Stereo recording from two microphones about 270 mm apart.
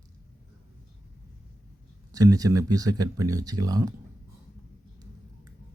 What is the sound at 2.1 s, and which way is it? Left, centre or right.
Speech, centre.